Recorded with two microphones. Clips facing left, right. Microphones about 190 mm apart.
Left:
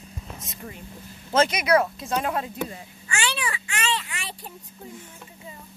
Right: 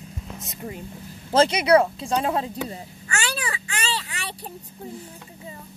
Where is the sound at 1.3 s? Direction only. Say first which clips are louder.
Right 3 dB; 30° right (ahead or behind).